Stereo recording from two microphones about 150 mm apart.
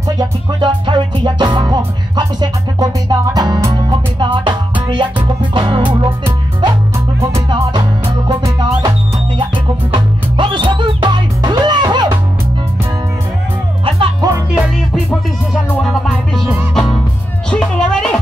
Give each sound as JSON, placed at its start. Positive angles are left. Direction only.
{"t": 0.1, "sound": "music", "side_deg": -25}
{"t": 9.9, "sound": "music", "side_deg": -35}
{"t": 13.8, "sound": "music", "side_deg": -40}
{"t": 15.0, "sound": "music", "side_deg": 5}